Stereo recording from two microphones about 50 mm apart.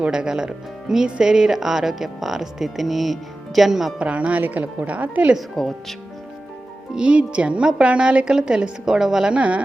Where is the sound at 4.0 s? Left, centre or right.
Right.